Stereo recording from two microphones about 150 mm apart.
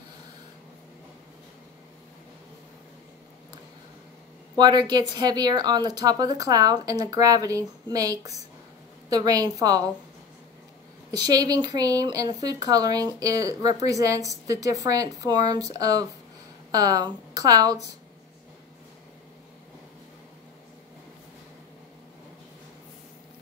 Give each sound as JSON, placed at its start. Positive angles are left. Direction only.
{"t": 4.6, "sound": "speech", "side_deg": -30}
{"t": 11.1, "sound": "speech", "side_deg": -25}